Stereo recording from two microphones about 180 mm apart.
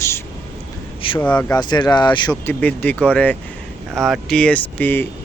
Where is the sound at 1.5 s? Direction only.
25° left (ahead or behind).